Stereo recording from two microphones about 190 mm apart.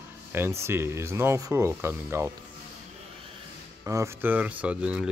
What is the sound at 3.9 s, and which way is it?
Speech, 10° right (ahead or behind).